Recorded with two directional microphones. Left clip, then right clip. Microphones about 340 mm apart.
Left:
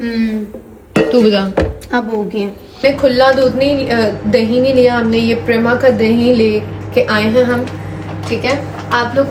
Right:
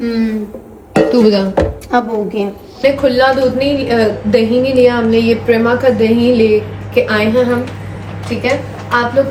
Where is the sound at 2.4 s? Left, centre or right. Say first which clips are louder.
Right 1 dB; centre.